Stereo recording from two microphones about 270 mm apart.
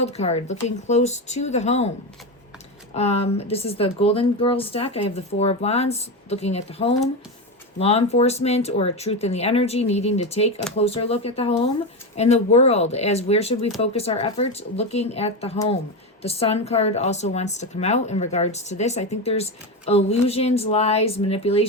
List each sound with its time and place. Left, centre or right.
0.0 s speech: left
2.9 s speech: left